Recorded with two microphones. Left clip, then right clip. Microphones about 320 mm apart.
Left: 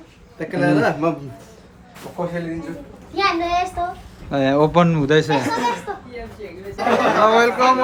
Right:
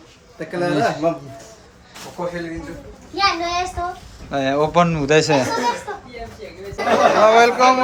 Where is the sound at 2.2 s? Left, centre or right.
Left.